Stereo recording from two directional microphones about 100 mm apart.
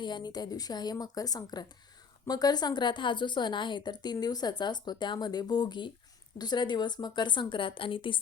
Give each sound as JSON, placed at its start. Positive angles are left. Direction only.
{"t": 0.0, "sound": "a woman's voice", "side_deg": 45}